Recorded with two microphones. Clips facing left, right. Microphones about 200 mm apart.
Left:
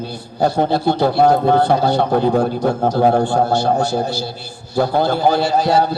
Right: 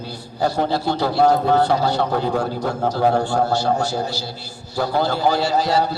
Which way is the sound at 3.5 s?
55° left (ahead or behind).